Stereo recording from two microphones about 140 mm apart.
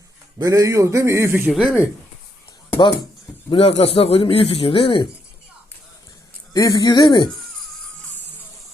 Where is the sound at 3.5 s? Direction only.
45° left (ahead or behind).